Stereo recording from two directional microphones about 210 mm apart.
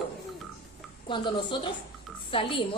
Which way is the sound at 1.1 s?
25° left (ahead or behind).